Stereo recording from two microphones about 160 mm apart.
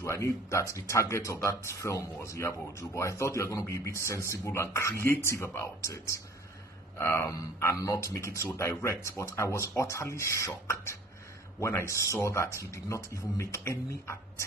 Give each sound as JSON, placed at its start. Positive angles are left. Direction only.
{"t": 0.0, "sound": "speech", "side_deg": 20}